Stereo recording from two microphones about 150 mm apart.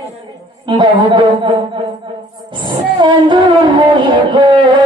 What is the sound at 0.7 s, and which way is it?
Speech, 30° right (ahead or behind).